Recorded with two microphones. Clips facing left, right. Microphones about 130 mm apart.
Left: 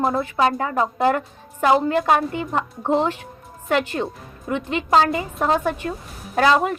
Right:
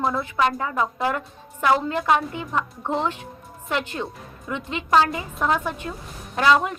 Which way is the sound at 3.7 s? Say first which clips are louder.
Left 5 dB; 55° left (ahead or behind).